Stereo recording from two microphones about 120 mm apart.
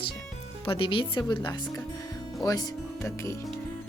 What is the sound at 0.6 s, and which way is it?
Speech, 50° left (ahead or behind).